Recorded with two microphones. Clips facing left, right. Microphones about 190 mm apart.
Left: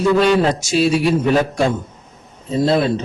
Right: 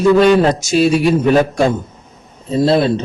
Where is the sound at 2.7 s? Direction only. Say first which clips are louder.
Right 3 dB; 30° right (ahead or behind).